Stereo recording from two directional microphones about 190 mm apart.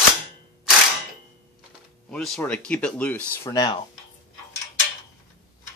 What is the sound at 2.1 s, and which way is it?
Speech, 5° left (ahead or behind).